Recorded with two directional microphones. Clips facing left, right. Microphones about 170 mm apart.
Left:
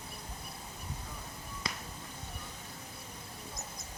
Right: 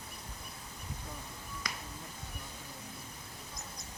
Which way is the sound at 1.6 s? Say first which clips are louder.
Left 3 dB; 25° left (ahead or behind).